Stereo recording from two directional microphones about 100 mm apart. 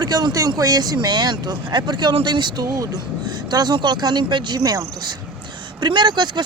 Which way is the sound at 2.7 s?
35° right (ahead or behind).